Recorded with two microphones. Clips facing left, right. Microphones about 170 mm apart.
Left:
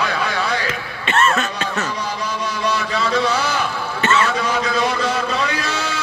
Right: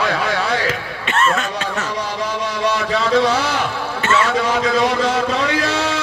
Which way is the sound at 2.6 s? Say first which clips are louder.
Right 3 dB; 85° right.